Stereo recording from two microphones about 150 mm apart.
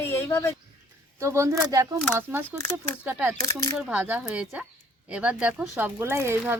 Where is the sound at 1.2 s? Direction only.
20° right (ahead or behind).